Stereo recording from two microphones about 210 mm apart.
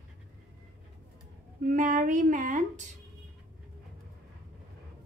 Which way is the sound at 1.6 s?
40° right (ahead or behind).